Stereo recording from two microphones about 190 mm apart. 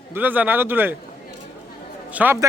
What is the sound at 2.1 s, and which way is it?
Speech, 10° right (ahead or behind).